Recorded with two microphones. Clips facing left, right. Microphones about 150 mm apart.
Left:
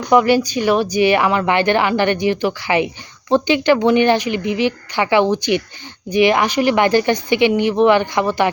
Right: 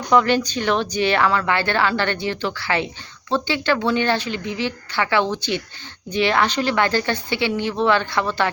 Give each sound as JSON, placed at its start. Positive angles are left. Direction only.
{"t": 0.1, "sound": "speech", "side_deg": 10}